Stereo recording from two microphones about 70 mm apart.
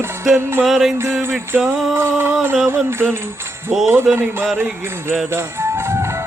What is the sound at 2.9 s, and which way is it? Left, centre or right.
Music, right.